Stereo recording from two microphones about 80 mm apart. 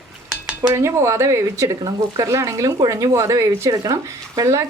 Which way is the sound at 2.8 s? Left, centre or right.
Right.